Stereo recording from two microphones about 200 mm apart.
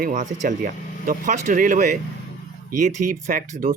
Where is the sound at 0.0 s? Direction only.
40° right (ahead or behind).